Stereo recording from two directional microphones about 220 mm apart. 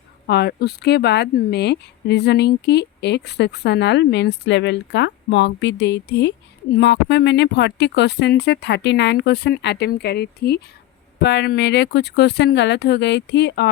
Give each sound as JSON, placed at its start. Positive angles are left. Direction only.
{"t": 0.3, "sound": "a woman's voice", "side_deg": 50}